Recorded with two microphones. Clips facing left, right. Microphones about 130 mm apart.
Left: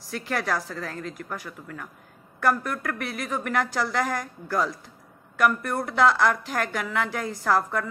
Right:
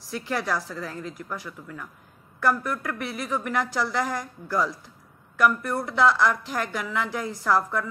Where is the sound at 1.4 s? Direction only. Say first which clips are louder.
Even; 55° left (ahead or behind).